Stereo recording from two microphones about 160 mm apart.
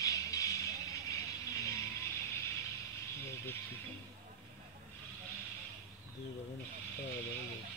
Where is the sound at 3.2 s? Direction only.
15° left (ahead or behind).